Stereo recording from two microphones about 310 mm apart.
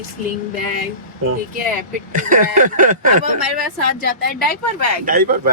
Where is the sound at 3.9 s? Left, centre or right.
Left.